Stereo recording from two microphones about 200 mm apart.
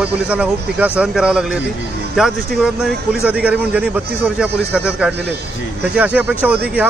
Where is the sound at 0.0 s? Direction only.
5° right (ahead or behind).